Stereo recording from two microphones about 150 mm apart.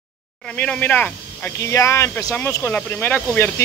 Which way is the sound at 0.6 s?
10° left (ahead or behind).